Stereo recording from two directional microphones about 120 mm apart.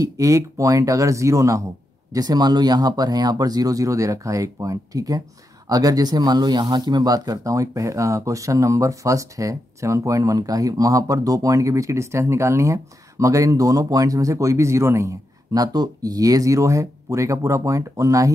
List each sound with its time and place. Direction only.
0.0 s speech: 25° right (ahead or behind)